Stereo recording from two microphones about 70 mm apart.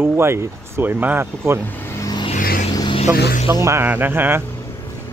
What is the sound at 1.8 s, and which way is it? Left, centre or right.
Vehicle, left.